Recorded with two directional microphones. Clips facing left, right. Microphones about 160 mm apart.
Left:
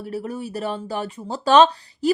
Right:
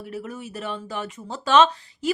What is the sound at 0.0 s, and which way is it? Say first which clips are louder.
Speech: left 5 dB; 35° left (ahead or behind).